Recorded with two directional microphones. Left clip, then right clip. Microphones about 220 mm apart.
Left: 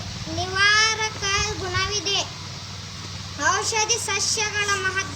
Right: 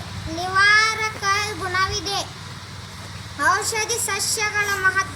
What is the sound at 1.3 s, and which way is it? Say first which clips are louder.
Speech: right 2 dB; 5° left (ahead or behind).